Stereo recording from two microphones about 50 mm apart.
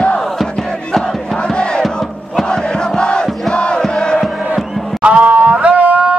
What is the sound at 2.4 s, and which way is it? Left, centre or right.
Chant, centre.